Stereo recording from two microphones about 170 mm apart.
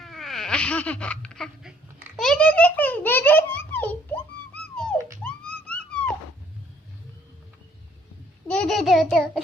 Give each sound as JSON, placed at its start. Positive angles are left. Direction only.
{"t": 0.0, "sound": "a sound", "side_deg": 0}
{"t": 5.2, "sound": "police car", "side_deg": 5}
{"t": 8.4, "sound": "child singing", "side_deg": 5}